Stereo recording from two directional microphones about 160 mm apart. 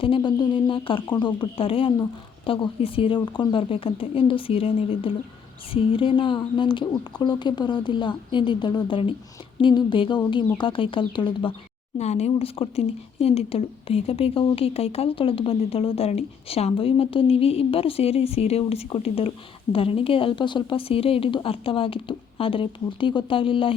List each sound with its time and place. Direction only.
0.0 s a woman's voice: 30° left (ahead or behind)
11.9 s speech: 45° left (ahead or behind)